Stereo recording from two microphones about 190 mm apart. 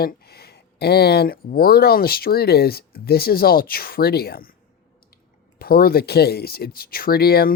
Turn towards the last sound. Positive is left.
turn(degrees=55)  # may be behind; listen again after turning